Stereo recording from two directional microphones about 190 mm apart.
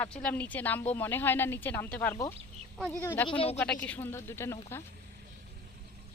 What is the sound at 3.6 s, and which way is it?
A woman's voice, 5° left (ahead or behind).